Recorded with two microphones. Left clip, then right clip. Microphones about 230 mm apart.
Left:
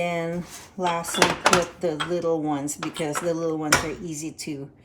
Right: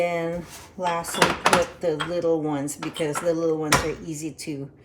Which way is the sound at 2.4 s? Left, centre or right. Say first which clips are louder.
Even; left.